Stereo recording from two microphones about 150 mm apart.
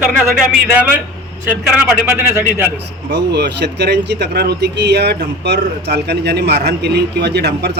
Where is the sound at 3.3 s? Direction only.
90° right.